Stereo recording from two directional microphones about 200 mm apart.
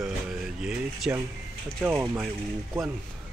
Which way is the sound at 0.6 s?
5° right (ahead or behind).